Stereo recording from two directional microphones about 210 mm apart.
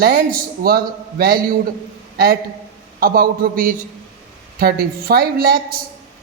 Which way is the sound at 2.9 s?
45° right (ahead or behind).